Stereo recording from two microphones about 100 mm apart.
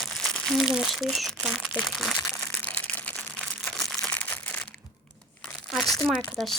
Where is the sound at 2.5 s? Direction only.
15° left (ahead or behind).